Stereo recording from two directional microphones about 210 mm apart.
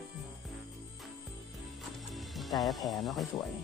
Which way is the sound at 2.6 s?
Centre (ahead or behind).